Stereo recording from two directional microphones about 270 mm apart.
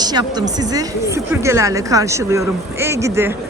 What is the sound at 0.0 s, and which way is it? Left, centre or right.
Speech, centre.